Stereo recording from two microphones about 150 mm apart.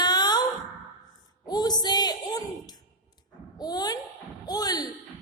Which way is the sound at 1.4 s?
25° left (ahead or behind).